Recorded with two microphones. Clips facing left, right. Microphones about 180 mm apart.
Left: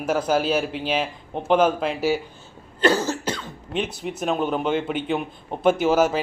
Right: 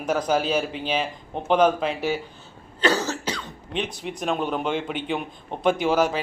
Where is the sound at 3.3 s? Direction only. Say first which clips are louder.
Left 2 dB; 5° left (ahead or behind).